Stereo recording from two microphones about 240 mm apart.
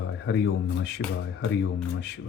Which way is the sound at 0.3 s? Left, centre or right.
Left.